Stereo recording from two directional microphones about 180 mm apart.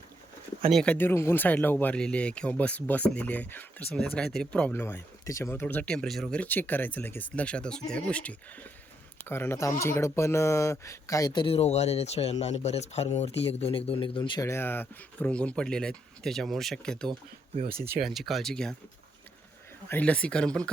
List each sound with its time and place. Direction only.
0.7 s speech: 5° left (ahead or behind)
19.9 s speech: 10° left (ahead or behind)